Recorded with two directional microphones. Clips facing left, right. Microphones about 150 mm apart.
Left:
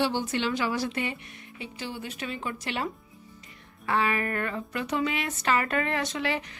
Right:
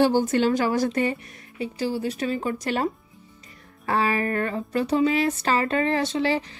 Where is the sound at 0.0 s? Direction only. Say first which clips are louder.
Right 8 dB; 45° right (ahead or behind).